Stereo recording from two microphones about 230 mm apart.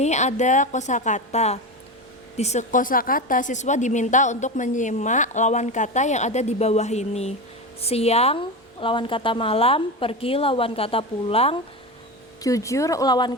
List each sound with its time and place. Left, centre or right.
0.0 s a woman's voice: left
12.4 s speech: centre